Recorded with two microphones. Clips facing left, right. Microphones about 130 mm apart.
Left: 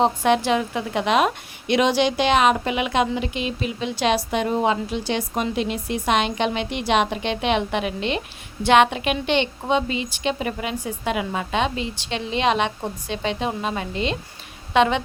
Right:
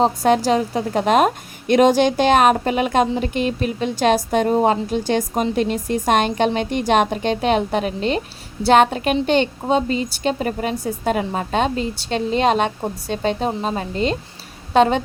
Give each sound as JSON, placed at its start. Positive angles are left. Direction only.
{"t": 0.0, "sound": "a woman's voice", "side_deg": -40}